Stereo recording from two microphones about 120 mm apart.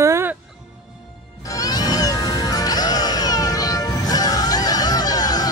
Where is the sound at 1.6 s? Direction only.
35° left (ahead or behind).